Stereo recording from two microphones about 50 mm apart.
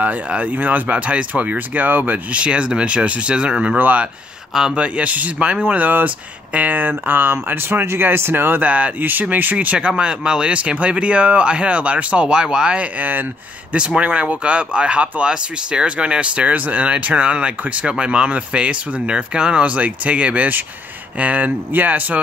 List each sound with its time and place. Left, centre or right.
0.3 s speech: right
2.4 s speech: right
3.7 s speech: right
9.8 s speech: centre